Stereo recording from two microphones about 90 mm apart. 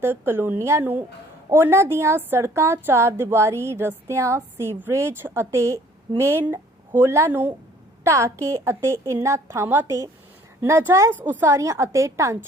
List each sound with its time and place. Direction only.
0.0 s a woman's voice: 25° right (ahead or behind)
11.4 s a woman's voice: 35° right (ahead or behind)